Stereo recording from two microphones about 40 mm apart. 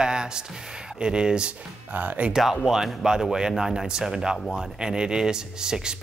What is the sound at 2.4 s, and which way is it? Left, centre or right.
Speech, centre.